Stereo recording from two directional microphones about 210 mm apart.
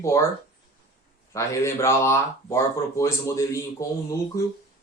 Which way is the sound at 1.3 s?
15° left (ahead or behind).